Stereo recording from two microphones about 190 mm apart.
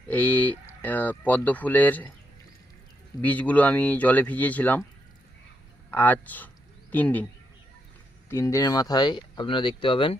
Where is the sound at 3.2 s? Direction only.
10° left (ahead or behind).